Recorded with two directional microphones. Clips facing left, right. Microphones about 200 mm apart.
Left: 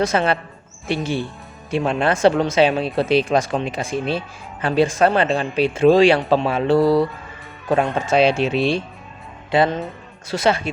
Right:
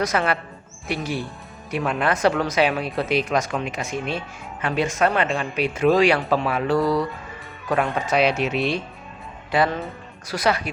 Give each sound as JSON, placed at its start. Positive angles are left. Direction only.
{"t": 0.0, "sound": "speech", "side_deg": 25}